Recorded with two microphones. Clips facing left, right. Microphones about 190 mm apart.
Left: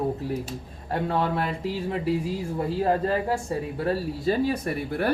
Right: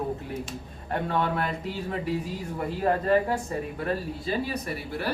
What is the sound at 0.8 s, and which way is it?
Speech, 30° left (ahead or behind).